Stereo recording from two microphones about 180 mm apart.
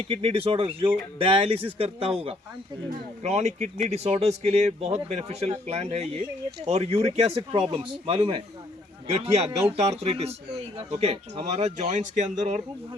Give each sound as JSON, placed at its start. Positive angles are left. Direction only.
{"t": 0.0, "sound": "speech", "side_deg": -35}